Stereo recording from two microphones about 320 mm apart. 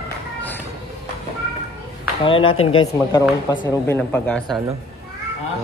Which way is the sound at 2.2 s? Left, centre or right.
Centre.